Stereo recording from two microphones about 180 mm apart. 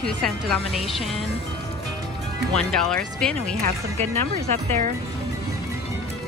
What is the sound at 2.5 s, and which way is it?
Speech, 5° left (ahead or behind).